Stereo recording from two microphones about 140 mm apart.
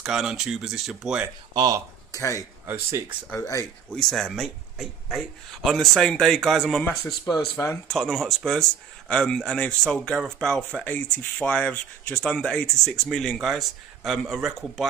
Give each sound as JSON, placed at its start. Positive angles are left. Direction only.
{"t": 0.0, "sound": "speech", "side_deg": 0}
{"t": 1.5, "sound": "speech", "side_deg": -30}
{"t": 2.1, "sound": "speech", "side_deg": 25}
{"t": 2.6, "sound": "speech", "side_deg": -15}
{"t": 3.3, "sound": "speech", "side_deg": 20}
{"t": 3.9, "sound": "speech", "side_deg": 5}
{"t": 7.1, "sound": "speech", "side_deg": 25}
{"t": 7.9, "sound": "speech", "side_deg": 0}